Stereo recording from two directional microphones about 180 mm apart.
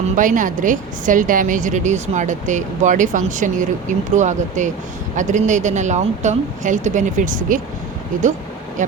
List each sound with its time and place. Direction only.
0.2 s a woman's voice: 45° right (ahead or behind)
8.8 s a woman's voice: 45° right (ahead or behind)